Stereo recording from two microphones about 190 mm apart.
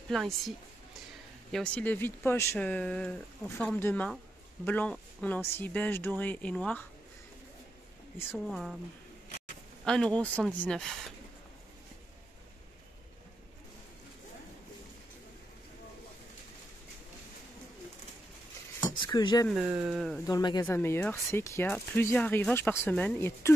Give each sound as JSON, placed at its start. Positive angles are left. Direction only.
{"t": 0.1, "sound": "speech", "side_deg": 0}
{"t": 1.5, "sound": "speech", "side_deg": 5}
{"t": 8.5, "sound": "speech", "side_deg": 0}
{"t": 9.8, "sound": "speech", "side_deg": 5}
{"t": 18.8, "sound": "a sound", "side_deg": 20}
{"t": 19.5, "sound": "speech", "side_deg": -5}
{"t": 20.2, "sound": "speech", "side_deg": 20}